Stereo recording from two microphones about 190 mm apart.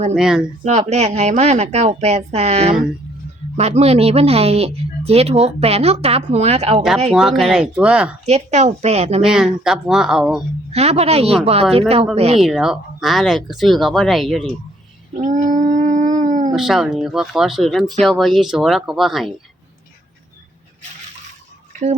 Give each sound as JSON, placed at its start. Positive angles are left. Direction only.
{"t": 0.1, "sound": "speech", "side_deg": -5}
{"t": 0.6, "sound": "speech", "side_deg": -35}
{"t": 7.1, "sound": "speech", "side_deg": 0}
{"t": 8.2, "sound": "speech", "side_deg": -35}
{"t": 9.2, "sound": "speech", "side_deg": -5}
{"t": 10.7, "sound": "speech", "side_deg": -35}
{"t": 12.4, "sound": "speech", "side_deg": 0}
{"t": 15.2, "sound": "howl", "side_deg": -40}
{"t": 16.5, "sound": "speech", "side_deg": 0}